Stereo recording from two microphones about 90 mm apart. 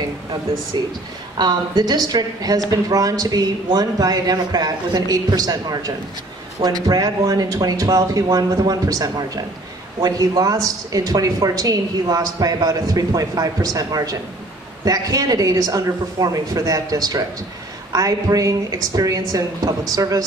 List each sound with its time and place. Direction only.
1.4 s a woman's voice: 55° right (ahead or behind)